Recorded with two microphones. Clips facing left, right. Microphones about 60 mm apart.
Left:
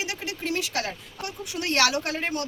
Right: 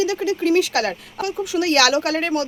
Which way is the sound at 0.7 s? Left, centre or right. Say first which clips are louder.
Right 9 dB; right.